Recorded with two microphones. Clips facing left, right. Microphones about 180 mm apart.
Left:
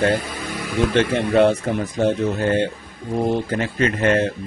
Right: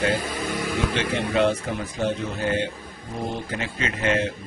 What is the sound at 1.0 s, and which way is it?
Speech, 55° left (ahead or behind).